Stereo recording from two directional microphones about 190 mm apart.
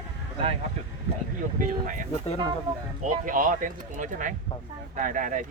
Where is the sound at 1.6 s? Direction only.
45° right (ahead or behind).